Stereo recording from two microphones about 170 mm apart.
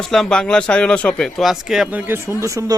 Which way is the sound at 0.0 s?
5° left (ahead or behind).